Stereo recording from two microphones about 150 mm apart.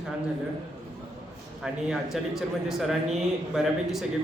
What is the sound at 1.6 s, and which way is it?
A man's voice, 5° right (ahead or behind).